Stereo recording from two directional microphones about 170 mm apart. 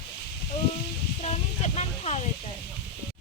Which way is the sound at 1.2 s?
40° left (ahead or behind).